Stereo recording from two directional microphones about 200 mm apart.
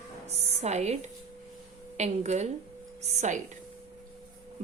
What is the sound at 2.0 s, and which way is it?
A woman's voice, 35° right (ahead or behind).